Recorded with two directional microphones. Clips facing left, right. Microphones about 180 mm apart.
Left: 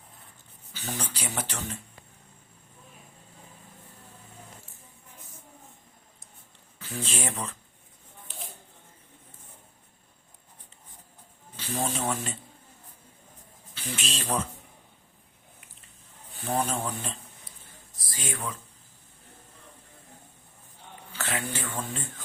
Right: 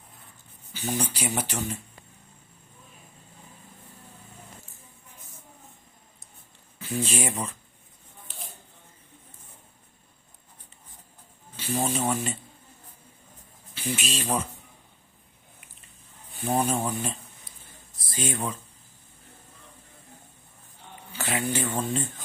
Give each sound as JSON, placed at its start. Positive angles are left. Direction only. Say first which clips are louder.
{"t": 0.7, "sound": "speech", "louder": "right 6 dB", "side_deg": -10}
{"t": 6.7, "sound": "speech", "louder": "right 6 dB", "side_deg": -10}
{"t": 11.5, "sound": "speech", "louder": "right 3 dB", "side_deg": -5}
{"t": 13.7, "sound": "speech", "louder": "right 5 dB", "side_deg": -5}
{"t": 16.4, "sound": "speech", "louder": "right 3 dB", "side_deg": -10}
{"t": 18.1, "sound": "speech", "louder": "right 5 dB", "side_deg": -25}
{"t": 21.1, "sound": "speech", "louder": "right 4 dB", "side_deg": -10}